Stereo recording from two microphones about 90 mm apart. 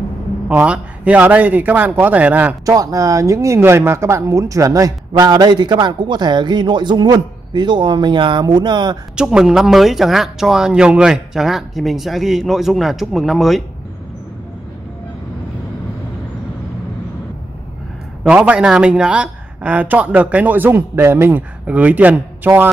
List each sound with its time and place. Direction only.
0.5 s speech: 15° right (ahead or behind)
2.6 s speech: 40° right (ahead or behind)
5.1 s a man's voice: 50° right (ahead or behind)
9.1 s speech: 10° right (ahead or behind)
18.3 s speech: 10° right (ahead or behind)